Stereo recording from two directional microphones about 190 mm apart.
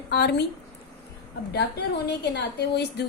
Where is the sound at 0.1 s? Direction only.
60° left (ahead or behind).